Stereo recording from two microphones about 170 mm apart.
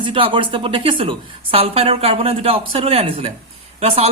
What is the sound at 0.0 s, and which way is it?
A woman's voice, 30° right (ahead or behind).